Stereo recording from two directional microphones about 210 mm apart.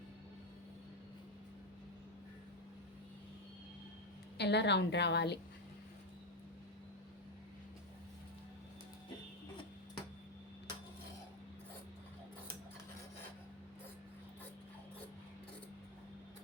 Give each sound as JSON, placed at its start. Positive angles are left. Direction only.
{"t": 4.4, "sound": "a woman's voice", "side_deg": 55}